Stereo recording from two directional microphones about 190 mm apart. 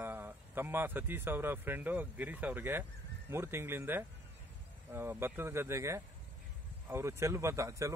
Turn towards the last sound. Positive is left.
turn(degrees=-15)  # may be behind; listen again after turning